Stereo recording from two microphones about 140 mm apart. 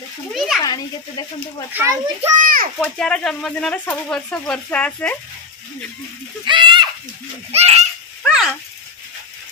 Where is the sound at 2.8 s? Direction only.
5° left (ahead or behind).